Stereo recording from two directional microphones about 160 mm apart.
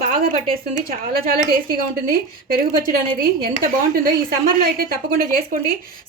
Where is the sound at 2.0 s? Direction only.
65° right (ahead or behind).